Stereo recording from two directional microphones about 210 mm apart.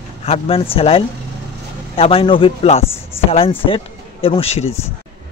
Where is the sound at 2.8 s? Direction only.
10° left (ahead or behind).